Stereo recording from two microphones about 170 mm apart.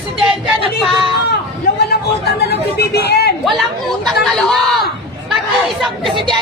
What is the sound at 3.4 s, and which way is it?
Speech, centre (ahead or behind).